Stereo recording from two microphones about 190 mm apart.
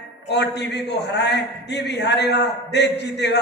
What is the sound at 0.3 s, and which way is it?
A woman's voice, 65° left (ahead or behind).